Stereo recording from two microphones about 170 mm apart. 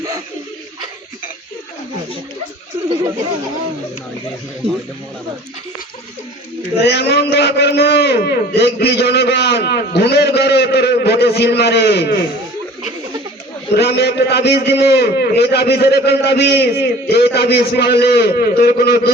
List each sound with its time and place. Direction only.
6.8 s a man's voice: 80° left
13.7 s a man's voice: 75° left (ahead or behind)